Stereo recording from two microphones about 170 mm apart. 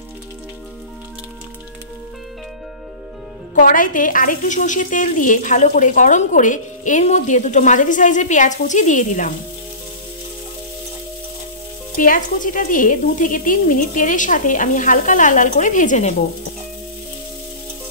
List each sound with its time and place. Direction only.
3.5 s a woman's voice: 55° left (ahead or behind)
12.0 s a woman's voice: 55° left (ahead or behind)